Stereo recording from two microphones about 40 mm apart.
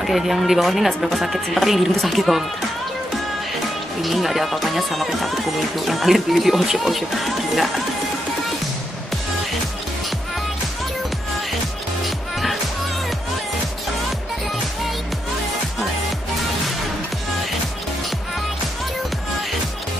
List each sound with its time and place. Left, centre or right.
0.0 s speech: centre
4.0 s speech: centre